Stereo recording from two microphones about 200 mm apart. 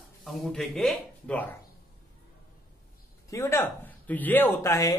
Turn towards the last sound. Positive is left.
turn(degrees=15)  # may be behind; listen again after turning